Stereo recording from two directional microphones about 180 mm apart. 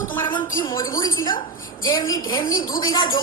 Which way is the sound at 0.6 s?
20° left (ahead or behind).